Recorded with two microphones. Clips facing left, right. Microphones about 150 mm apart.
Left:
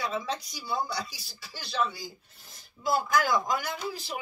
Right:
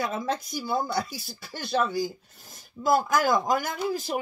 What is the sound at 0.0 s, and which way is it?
Speech, 50° right (ahead or behind).